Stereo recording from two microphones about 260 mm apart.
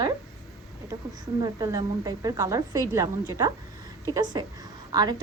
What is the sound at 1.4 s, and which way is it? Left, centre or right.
A woman's voice, centre.